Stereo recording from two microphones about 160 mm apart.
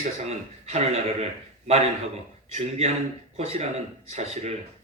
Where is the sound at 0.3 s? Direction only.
40° right (ahead or behind).